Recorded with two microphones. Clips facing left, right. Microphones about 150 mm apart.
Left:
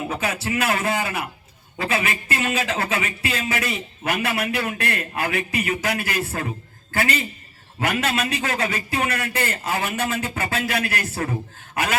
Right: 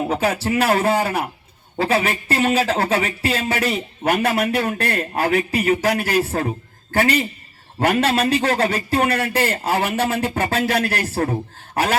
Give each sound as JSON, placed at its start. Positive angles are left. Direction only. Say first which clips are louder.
{"t": 0.0, "sound": "a man's voice", "louder": "right 6 dB", "side_deg": -35}
{"t": 4.0, "sound": "a man's voice", "louder": "right 5 dB", "side_deg": -50}